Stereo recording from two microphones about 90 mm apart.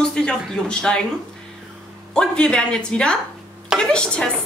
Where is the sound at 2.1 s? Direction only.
10° left (ahead or behind).